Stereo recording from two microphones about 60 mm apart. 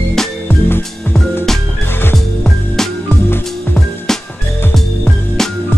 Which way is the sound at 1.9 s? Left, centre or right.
Left.